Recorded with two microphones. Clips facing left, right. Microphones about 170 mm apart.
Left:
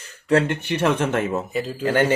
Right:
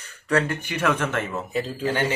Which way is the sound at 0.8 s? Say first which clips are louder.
Left 3 dB; 30° left (ahead or behind).